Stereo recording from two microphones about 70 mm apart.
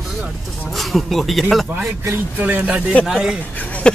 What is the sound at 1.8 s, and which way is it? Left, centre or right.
Speech, right.